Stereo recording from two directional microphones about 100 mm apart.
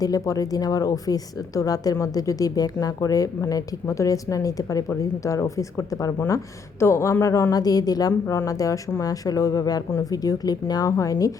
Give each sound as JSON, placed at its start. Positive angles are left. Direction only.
{"t": 0.0, "sound": "speech", "side_deg": 35}